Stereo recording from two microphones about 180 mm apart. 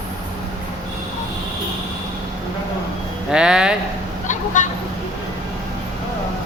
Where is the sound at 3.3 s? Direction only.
5° right (ahead or behind).